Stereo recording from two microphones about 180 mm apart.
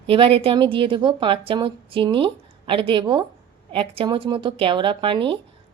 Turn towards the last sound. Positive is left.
turn(degrees=-30)  # may be behind; listen again after turning